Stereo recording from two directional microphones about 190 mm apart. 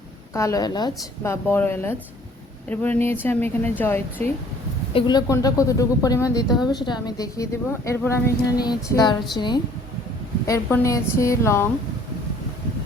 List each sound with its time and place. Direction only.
0.3 s speech: 15° left (ahead or behind)
4.9 s a woman's voice: 20° left (ahead or behind)
10.4 s speech: 15° left (ahead or behind)